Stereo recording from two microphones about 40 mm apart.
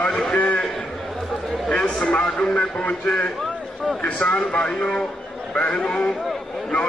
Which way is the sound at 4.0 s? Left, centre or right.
Left.